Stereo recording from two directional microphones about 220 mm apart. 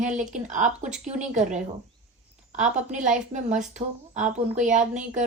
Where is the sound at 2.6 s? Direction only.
35° right (ahead or behind).